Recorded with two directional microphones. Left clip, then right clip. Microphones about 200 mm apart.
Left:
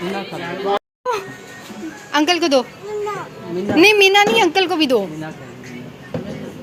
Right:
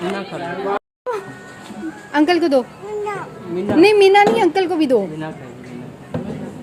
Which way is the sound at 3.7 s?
10° right (ahead or behind).